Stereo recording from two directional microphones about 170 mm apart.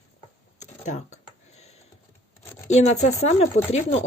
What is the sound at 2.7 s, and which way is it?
Speech, 40° left (ahead or behind).